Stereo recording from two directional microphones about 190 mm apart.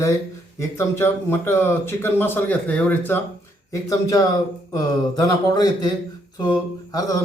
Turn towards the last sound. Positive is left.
turn(degrees=20)  # may be behind; listen again after turning